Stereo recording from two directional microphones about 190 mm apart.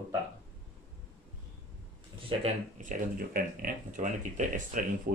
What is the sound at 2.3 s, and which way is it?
Speech, 40° right (ahead or behind).